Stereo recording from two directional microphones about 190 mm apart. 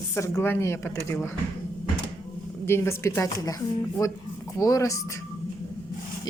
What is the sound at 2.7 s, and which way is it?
Speech, 15° left (ahead or behind).